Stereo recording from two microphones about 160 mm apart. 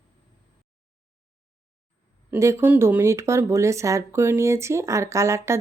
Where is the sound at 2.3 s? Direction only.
15° right (ahead or behind).